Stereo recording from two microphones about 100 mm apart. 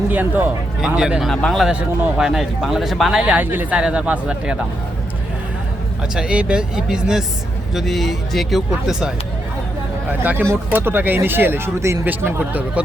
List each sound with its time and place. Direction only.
0.1 s speech: 20° right (ahead or behind)
0.8 s speech: 5° right (ahead or behind)
1.3 s speech: 5° left (ahead or behind)
2.1 s speech: 5° right (ahead or behind)
6.1 s speech: 10° right (ahead or behind)
10.1 s speech: 20° right (ahead or behind)